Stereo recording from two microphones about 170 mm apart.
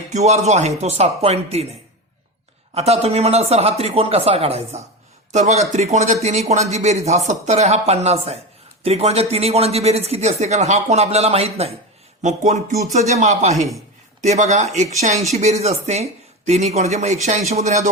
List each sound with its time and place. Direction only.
0.1 s speech: 40° right (ahead or behind)
2.7 s speech: 35° right (ahead or behind)